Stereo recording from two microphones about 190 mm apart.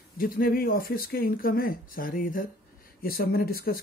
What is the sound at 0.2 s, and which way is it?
Speech, 50° left (ahead or behind).